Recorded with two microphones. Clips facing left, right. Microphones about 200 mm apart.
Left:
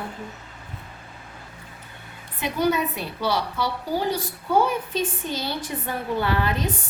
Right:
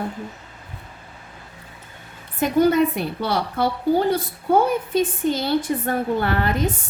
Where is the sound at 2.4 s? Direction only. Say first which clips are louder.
Right 6 dB; 50° right (ahead or behind).